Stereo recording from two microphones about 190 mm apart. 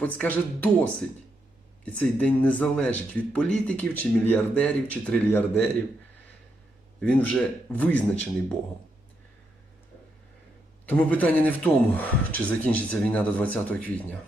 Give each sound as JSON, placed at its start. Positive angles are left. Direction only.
{"t": 0.0, "sound": "speech", "side_deg": 10}
{"t": 7.0, "sound": "speech", "side_deg": 5}
{"t": 10.8, "sound": "speech", "side_deg": 10}